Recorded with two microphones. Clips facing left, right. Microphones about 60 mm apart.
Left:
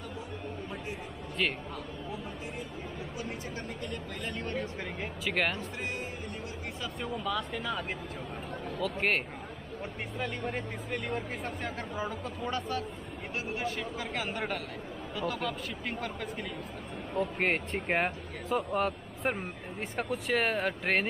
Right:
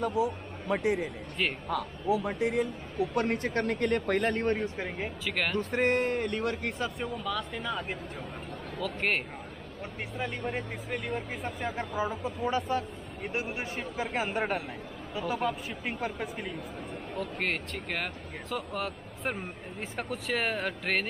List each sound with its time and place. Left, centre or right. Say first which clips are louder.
0.0 s speech: right 11 dB; right
1.4 s speech: even; centre
2.0 s speech: right 11 dB; right
4.7 s speech: right 3 dB; centre
5.2 s speech: left 1 dB; centre
5.6 s speech: right 10 dB; right
7.0 s speech: even; centre
13.3 s a man's voice: even; right
17.2 s speech: left 3 dB; centre
17.7 s speech: left 5 dB; left; by 21.1 s centre